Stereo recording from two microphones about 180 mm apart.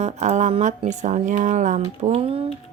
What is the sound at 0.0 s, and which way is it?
Speech, 40° right (ahead or behind).